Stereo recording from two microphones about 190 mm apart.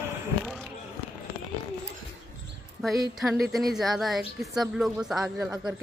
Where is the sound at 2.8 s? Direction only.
Centre (ahead or behind).